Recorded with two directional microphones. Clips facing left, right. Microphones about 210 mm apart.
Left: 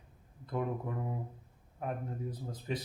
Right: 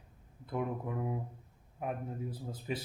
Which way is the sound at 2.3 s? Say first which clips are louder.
Even; 10° right (ahead or behind).